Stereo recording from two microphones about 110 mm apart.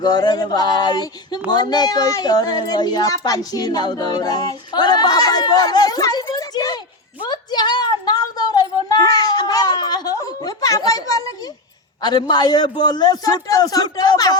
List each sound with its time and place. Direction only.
0.0 s speech: 40° left (ahead or behind)
7.2 s a sound: 40° left (ahead or behind)
12.0 s speech: 40° left (ahead or behind)